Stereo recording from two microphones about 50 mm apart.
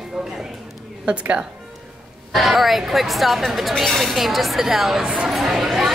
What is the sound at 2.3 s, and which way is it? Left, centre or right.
Speech, centre.